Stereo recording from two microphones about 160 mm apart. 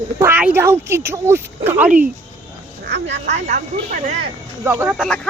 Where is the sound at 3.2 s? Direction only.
50° right (ahead or behind).